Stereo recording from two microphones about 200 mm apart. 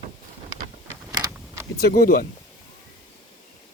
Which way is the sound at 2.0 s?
45° left (ahead or behind).